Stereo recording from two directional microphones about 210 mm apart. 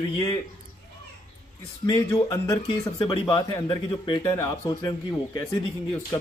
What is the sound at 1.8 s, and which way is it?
Speech, 15° left (ahead or behind).